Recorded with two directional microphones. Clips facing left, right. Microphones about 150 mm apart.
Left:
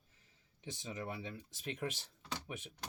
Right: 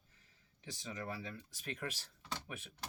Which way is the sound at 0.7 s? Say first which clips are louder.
Left 1 dB; 20° left (ahead or behind).